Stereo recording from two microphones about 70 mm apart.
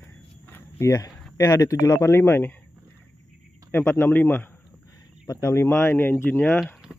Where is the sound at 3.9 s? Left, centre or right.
Left.